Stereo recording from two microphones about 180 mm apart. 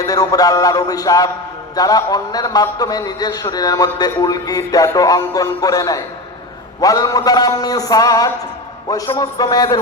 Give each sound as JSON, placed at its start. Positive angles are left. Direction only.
{"t": 0.0, "sound": "a man's voice", "side_deg": 20}